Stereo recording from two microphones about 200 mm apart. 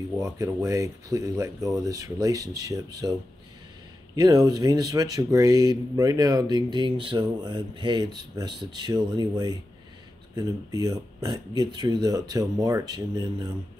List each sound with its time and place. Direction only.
0.2 s speech: 15° right (ahead or behind)